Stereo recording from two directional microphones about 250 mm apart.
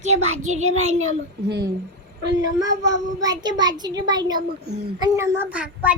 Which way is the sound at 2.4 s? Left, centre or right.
Centre.